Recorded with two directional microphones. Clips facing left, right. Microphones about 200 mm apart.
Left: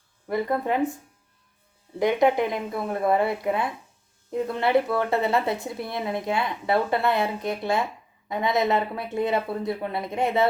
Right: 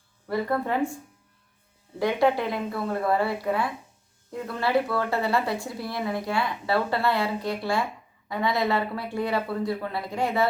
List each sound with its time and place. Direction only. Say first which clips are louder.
0.3 s speech: left 1 dB; 20° left (ahead or behind)
2.0 s speech: left 2 dB; 20° left (ahead or behind)